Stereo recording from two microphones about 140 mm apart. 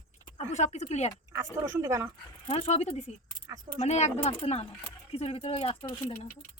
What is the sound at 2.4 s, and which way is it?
Speech, 45° left (ahead or behind).